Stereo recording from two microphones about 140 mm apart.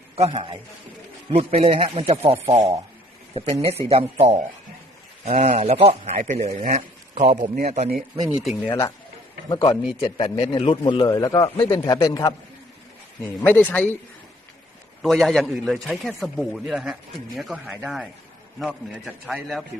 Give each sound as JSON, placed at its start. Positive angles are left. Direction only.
{"t": 0.2, "sound": "a man's voice", "side_deg": -40}
{"t": 1.3, "sound": "speech", "side_deg": -50}
{"t": 5.3, "sound": "a man's voice", "side_deg": -70}
{"t": 5.5, "sound": "speech", "side_deg": -45}
{"t": 6.1, "sound": "speech", "side_deg": -55}
{"t": 8.3, "sound": "a man's voice", "side_deg": -5}
{"t": 9.5, "sound": "a man's voice", "side_deg": 30}
{"t": 11.0, "sound": "a man's voice", "side_deg": 25}
{"t": 13.4, "sound": "a man's voice", "side_deg": 10}
{"t": 15.0, "sound": "a man's voice", "side_deg": 0}